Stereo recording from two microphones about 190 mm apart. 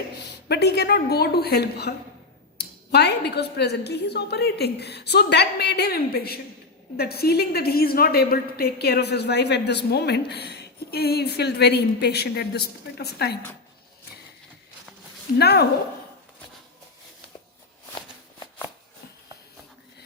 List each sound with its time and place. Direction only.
0.3 s a woman's voice: 60° left (ahead or behind)
15.4 s a woman's voice: 60° left (ahead or behind)